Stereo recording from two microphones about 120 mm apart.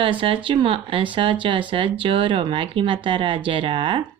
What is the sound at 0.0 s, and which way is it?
Speech, 50° right (ahead or behind).